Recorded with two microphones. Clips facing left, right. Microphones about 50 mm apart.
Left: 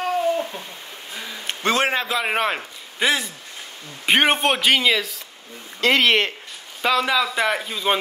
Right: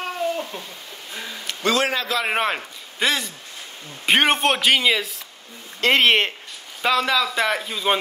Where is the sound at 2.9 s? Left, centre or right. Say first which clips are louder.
Left 1 dB; centre.